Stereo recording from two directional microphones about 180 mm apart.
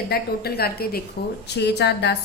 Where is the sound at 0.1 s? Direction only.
60° left (ahead or behind).